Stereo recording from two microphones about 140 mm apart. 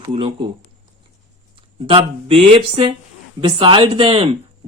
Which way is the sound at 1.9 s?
40° right (ahead or behind).